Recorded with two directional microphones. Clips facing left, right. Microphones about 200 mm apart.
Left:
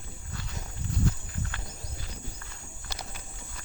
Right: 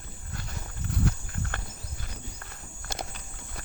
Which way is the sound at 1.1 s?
65° right (ahead or behind).